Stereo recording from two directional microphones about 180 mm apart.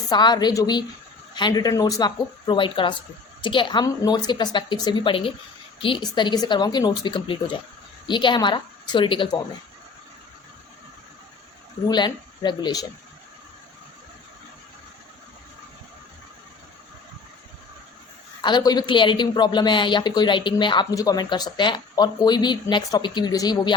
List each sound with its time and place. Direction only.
0.1 s speech: 25° left (ahead or behind)
11.9 s speech: 25° left (ahead or behind)
18.4 s speech: 25° left (ahead or behind)